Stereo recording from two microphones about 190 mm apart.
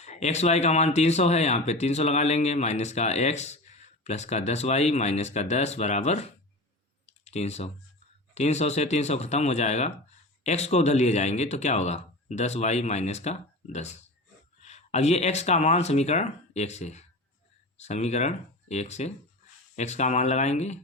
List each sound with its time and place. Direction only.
0.0 s speech: 35° left (ahead or behind)
7.3 s speech: 35° left (ahead or behind)